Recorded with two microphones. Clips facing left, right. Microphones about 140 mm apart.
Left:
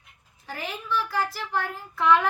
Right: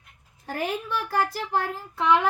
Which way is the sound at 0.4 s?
50° right (ahead or behind).